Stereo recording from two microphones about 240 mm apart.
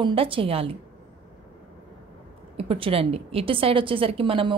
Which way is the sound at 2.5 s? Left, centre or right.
Right.